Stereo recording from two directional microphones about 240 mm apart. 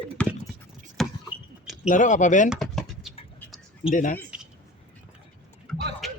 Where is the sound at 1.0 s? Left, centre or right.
Centre.